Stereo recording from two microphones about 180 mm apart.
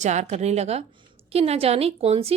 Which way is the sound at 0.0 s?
40° right (ahead or behind).